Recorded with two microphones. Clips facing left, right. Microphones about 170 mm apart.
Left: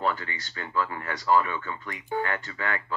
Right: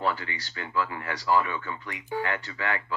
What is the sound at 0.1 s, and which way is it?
Speech, 45° left (ahead or behind).